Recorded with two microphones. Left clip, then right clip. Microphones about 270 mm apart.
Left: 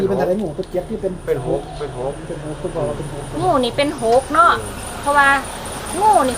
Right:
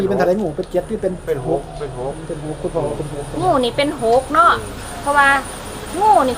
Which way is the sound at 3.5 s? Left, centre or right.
Centre.